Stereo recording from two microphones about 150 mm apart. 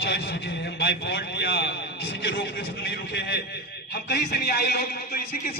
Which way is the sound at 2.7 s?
90° left.